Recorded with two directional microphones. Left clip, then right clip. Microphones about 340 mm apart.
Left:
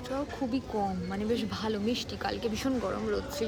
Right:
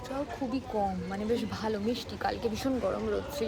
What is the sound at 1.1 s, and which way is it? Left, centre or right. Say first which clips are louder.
A woman's voice: even; centre.